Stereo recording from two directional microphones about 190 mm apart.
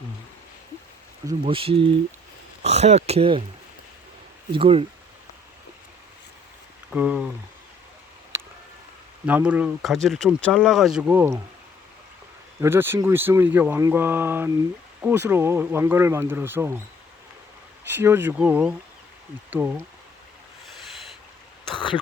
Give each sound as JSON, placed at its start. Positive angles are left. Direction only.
{"t": 1.3, "sound": "speech", "side_deg": -30}
{"t": 4.5, "sound": "speech", "side_deg": -30}
{"t": 6.9, "sound": "speech", "side_deg": -10}
{"t": 9.2, "sound": "speech", "side_deg": -5}
{"t": 12.5, "sound": "speech", "side_deg": -10}
{"t": 17.9, "sound": "speech", "side_deg": -10}